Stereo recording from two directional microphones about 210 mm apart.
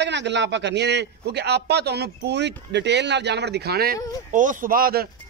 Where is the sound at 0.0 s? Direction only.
55° right (ahead or behind).